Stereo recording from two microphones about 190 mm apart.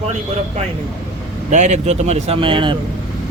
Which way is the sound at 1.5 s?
40° right (ahead or behind).